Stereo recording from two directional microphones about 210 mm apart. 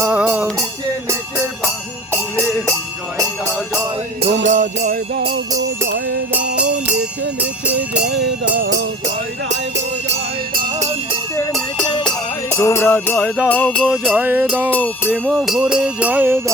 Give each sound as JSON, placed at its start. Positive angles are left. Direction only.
{"t": 0.0, "sound": "music", "side_deg": -5}
{"t": 4.4, "sound": "jingle bell", "side_deg": -35}
{"t": 8.0, "sound": "music", "side_deg": -55}
{"t": 11.3, "sound": "music", "side_deg": 0}
{"t": 14.7, "sound": "music", "side_deg": 10}
{"t": 15.3, "sound": "music", "side_deg": -5}